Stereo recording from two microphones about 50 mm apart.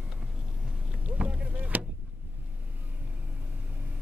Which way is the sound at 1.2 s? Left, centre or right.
Right.